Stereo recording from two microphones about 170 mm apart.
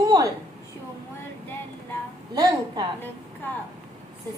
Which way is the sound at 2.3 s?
25° right (ahead or behind).